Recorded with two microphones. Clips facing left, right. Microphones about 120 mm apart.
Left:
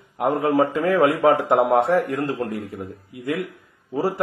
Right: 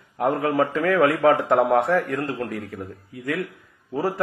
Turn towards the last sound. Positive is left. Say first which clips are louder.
# left 2 dB
turn(degrees=25)  # may be behind; listen again after turning